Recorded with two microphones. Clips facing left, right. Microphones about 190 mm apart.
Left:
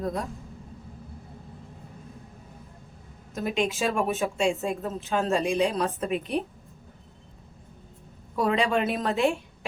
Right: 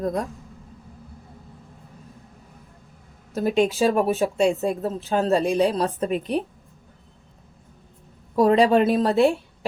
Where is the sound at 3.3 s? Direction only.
35° right (ahead or behind).